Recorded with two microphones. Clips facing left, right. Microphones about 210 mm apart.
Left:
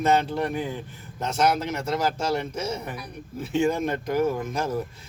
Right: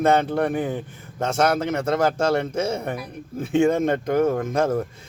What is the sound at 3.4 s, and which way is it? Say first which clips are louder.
Speech: right 5 dB; 30° right (ahead or behind).